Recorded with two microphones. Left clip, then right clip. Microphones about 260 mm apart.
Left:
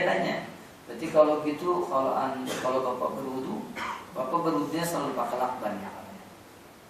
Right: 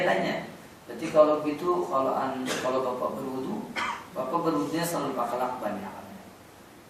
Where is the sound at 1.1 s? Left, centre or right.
Left.